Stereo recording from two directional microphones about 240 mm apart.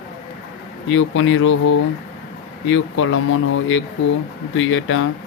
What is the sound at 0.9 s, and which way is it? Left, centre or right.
Speech, left.